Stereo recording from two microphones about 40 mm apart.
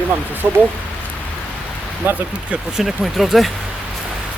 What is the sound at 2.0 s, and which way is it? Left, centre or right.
Speech, right.